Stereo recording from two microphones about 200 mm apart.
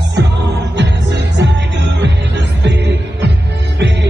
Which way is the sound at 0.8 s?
60° right (ahead or behind).